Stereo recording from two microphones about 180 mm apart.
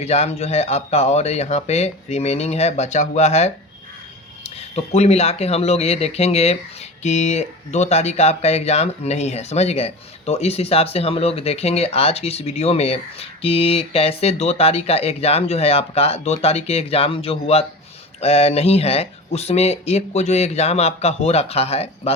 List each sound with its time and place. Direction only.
0.0 s speech: 35° left (ahead or behind)